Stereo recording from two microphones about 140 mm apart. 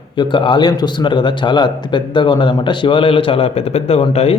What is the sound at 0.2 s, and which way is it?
A man's voice, 35° left (ahead or behind).